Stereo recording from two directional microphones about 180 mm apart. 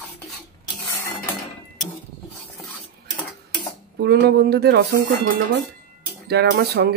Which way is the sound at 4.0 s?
65° right (ahead or behind).